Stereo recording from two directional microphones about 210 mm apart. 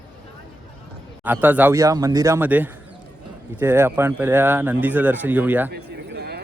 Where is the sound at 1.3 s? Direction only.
10° right (ahead or behind).